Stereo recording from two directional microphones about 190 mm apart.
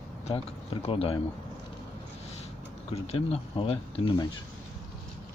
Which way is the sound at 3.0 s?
30° left (ahead or behind).